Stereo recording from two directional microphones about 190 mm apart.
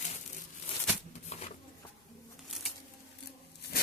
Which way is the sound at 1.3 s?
35° left (ahead or behind).